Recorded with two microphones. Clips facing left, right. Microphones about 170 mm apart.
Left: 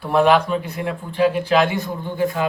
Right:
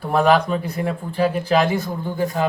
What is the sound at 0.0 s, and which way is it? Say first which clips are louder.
Speech: left 1 dB; 40° right (ahead or behind).